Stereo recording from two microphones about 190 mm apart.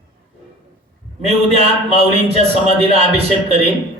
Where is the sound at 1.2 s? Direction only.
35° right (ahead or behind).